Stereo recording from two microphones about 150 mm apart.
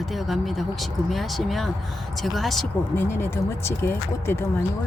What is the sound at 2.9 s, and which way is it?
Speech, 15° left (ahead or behind).